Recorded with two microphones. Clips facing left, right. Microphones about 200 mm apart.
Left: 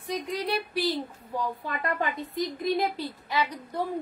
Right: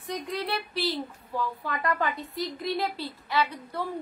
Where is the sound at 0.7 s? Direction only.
15° left (ahead or behind).